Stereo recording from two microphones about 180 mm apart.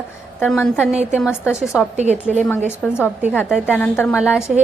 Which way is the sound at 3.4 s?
5° right (ahead or behind).